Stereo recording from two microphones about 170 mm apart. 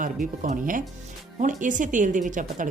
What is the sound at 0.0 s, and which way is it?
A woman's voice, 50° right (ahead or behind).